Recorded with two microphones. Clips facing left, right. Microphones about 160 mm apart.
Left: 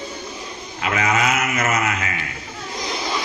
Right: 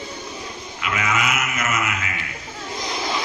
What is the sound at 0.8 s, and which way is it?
Speech, 35° left (ahead or behind).